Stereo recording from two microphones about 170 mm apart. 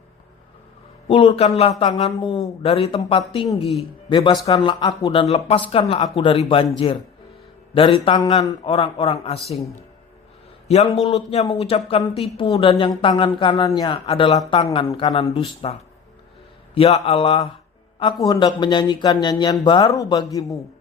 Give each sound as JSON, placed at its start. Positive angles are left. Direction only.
{"t": 1.0, "sound": "a man's voice", "side_deg": 35}
{"t": 5.3, "sound": "a man's voice", "side_deg": 35}
{"t": 10.7, "sound": "a man's voice", "side_deg": 40}
{"t": 16.7, "sound": "a man's voice", "side_deg": 35}